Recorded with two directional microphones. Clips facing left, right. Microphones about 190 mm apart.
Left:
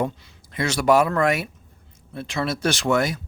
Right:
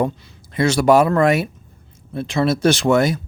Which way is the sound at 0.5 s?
30° right (ahead or behind).